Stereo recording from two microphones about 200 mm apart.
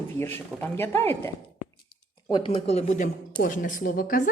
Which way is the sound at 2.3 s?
25° left (ahead or behind).